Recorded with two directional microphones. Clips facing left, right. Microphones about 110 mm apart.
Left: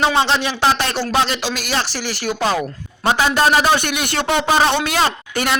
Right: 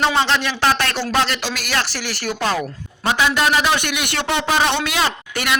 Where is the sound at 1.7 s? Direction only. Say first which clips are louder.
Left 1 dB; 30° left (ahead or behind).